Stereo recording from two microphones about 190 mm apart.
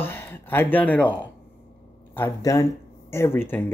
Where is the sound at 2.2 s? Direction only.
15° left (ahead or behind).